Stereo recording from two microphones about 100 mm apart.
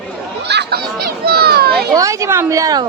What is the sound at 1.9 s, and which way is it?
Speech, 35° right (ahead or behind).